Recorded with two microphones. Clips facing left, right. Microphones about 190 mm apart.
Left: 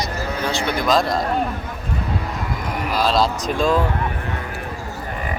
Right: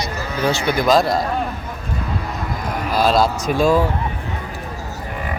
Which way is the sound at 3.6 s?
5° right (ahead or behind).